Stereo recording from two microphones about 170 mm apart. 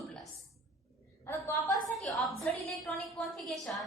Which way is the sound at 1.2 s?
15° left (ahead or behind).